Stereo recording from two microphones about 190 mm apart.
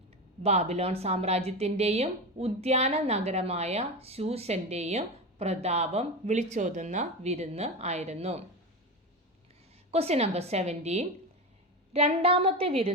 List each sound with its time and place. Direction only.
0.4 s speech: 35° right (ahead or behind)
9.9 s a woman's voice: 35° right (ahead or behind)